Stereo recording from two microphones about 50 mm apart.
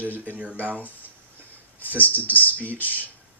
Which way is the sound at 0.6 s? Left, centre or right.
Right.